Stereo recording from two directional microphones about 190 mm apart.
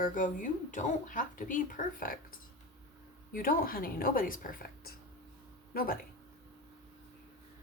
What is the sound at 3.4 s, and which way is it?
A woman's voice, 50° left (ahead or behind).